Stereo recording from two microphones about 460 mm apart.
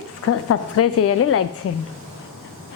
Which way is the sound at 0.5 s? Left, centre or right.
Left.